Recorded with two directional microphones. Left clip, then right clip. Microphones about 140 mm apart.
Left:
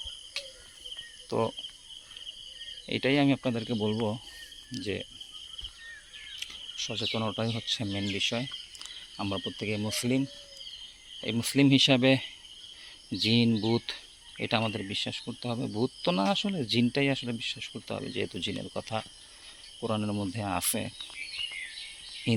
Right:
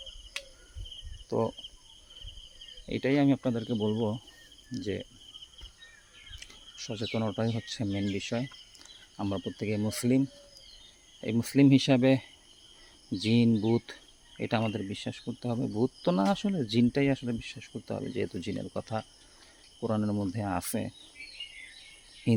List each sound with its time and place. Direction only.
0.4 s cricket: centre (ahead or behind)
1.3 s speech: 25° right (ahead or behind)
2.8 s speech: 15° right (ahead or behind)
4.7 s speech: 30° right (ahead or behind)
6.4 s bird: 35° right (ahead or behind)
7.1 s speech: 30° right (ahead or behind)
9.1 s speech: 25° right (ahead or behind)
9.5 s speech: 35° right (ahead or behind)
13.5 s speech: 5° right (ahead or behind)
13.7 s speech: 30° right (ahead or behind)
22.3 s a sound: 40° right (ahead or behind)